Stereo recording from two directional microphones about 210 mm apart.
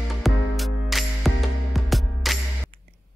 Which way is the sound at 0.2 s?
Centre (ahead or behind).